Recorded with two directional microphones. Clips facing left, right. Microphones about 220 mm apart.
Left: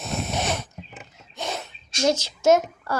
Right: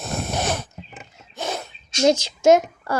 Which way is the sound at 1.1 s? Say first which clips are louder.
Right 3 dB; centre (ahead or behind).